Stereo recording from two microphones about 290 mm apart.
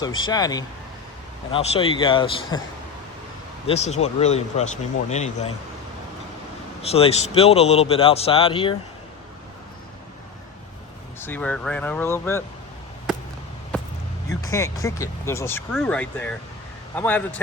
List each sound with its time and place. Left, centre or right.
0.0 s speech: centre
3.7 s speech: left
6.8 s speech: left
11.2 s speech: centre
14.3 s speech: centre